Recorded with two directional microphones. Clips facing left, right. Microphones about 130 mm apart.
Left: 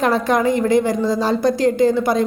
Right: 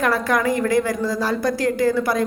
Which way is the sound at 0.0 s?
25° left (ahead or behind).